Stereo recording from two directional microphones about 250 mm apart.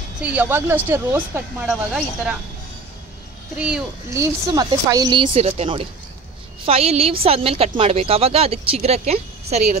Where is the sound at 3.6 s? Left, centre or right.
Centre.